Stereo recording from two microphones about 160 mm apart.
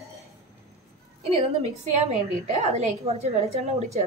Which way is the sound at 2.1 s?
40° right (ahead or behind).